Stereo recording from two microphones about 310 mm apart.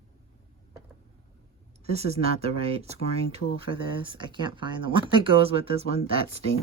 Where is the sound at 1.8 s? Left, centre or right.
Centre.